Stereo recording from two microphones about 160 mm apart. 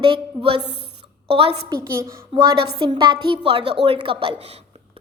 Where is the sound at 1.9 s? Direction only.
15° right (ahead or behind).